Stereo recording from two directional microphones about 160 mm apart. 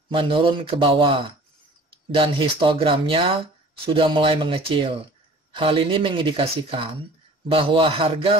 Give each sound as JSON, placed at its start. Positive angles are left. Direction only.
{"t": 0.1, "sound": "speech", "side_deg": -30}